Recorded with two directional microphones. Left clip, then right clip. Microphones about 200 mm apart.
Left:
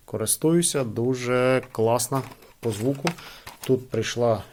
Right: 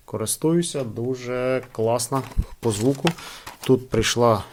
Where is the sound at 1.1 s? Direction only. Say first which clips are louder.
Left 2 dB; 35° left (ahead or behind).